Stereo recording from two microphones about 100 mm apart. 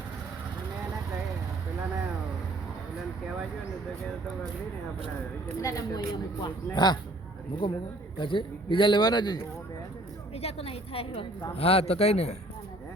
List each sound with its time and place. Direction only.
5.6 s a woman's voice: 35° left (ahead or behind)
6.4 s speech: 45° left (ahead or behind)
7.6 s speech: 60° left (ahead or behind); by 9.4 s 45° left (ahead or behind)
10.4 s a woman's voice: 85° left